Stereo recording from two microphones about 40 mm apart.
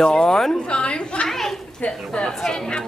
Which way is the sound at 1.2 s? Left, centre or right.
Centre.